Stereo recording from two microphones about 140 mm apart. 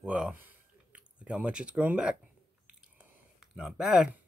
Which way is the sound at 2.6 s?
5° right (ahead or behind).